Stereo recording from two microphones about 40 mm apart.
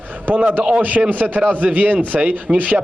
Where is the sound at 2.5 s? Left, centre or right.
Right.